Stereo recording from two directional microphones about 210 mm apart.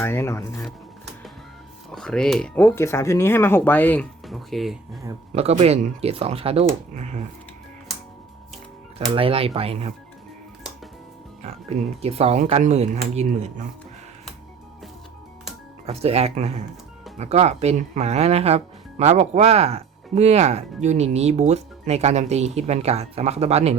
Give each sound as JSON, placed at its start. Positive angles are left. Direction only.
{"t": 0.0, "sound": "speech", "side_deg": 10}
{"t": 1.9, "sound": "speech", "side_deg": 0}
{"t": 5.3, "sound": "speech", "side_deg": -30}
{"t": 9.0, "sound": "speech", "side_deg": -25}
{"t": 11.4, "sound": "speech", "side_deg": -30}
{"t": 15.9, "sound": "speech", "side_deg": -30}